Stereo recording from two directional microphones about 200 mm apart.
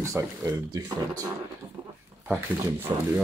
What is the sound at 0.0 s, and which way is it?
Speech, 15° right (ahead or behind).